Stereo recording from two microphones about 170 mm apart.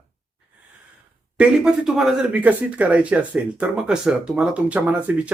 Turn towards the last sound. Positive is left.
turn(degrees=-10)  # may be behind; listen again after turning